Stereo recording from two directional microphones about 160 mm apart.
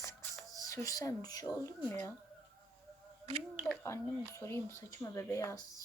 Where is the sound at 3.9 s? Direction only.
15° left (ahead or behind).